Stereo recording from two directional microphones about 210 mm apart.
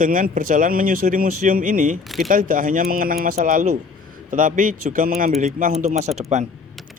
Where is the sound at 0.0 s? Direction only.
40° right (ahead or behind).